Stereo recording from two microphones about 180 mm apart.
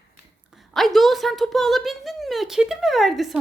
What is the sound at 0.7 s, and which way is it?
Speech, centre (ahead or behind).